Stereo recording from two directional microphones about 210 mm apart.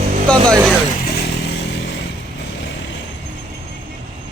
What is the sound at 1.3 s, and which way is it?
Motorcycle, 55° left (ahead or behind).